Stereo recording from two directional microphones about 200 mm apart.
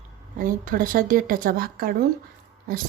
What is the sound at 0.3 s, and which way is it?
Speech, 45° right (ahead or behind).